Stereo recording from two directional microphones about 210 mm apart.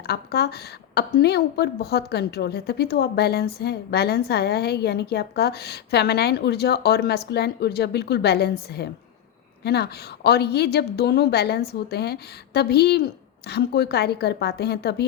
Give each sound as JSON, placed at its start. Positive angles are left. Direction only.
{"t": 0.1, "sound": "a woman's voice", "side_deg": 50}